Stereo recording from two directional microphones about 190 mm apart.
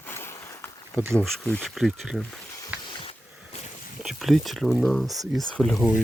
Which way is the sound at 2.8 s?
25° left (ahead or behind).